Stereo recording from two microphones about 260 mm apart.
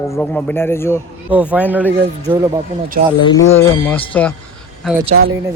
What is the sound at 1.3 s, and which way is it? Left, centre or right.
Speech, centre.